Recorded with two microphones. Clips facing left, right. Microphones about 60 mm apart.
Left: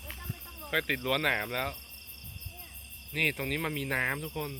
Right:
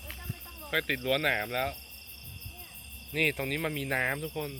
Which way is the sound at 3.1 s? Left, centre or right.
Centre.